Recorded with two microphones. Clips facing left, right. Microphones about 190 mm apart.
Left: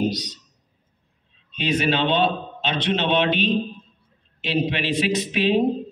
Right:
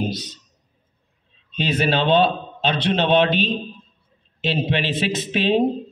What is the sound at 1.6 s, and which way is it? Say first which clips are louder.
A man's voice: right 1 dB; 30° right (ahead or behind).